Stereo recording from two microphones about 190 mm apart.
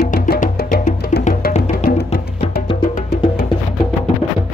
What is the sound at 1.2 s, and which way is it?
Music, 40° left (ahead or behind).